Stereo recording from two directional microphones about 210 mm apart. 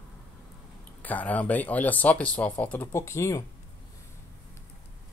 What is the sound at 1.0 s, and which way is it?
Speech, 5° left (ahead or behind).